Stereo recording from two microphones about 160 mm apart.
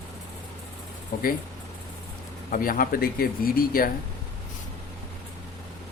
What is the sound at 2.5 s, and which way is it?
Speech, 60° left (ahead or behind).